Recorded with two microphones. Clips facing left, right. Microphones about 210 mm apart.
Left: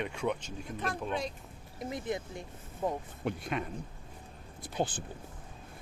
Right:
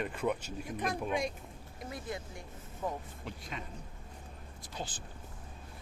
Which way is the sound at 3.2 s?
60° left (ahead or behind).